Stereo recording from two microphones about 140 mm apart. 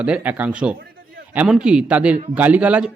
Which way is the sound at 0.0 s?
10° right (ahead or behind).